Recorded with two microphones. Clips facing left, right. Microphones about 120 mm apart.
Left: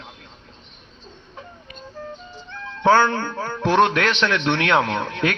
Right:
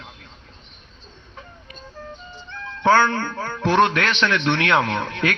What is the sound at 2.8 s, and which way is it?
A man's voice, 10° left (ahead or behind).